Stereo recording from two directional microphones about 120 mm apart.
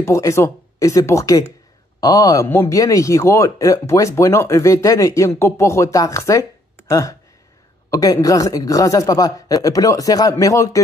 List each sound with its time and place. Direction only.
0.0 s speech: 25° left (ahead or behind)